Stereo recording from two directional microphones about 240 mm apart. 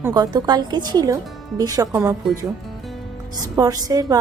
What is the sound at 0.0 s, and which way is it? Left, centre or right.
A woman's voice, centre.